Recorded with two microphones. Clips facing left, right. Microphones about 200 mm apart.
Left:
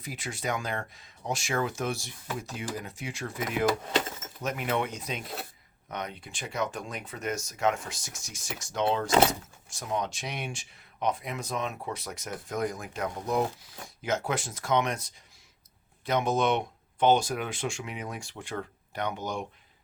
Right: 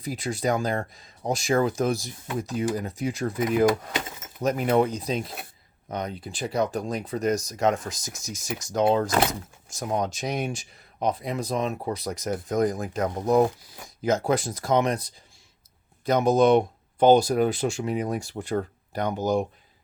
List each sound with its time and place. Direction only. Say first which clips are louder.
0.0 s speech: right 8 dB; 35° right (ahead or behind)
8.3 s speech: right 8 dB; 20° right (ahead or behind)
8.6 s speech: right 6 dB; 40° right (ahead or behind)